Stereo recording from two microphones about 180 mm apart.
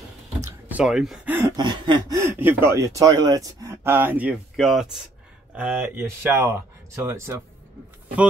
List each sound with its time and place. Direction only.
0.4 s speech: 10° right (ahead or behind)
1.6 s speech: 25° right (ahead or behind)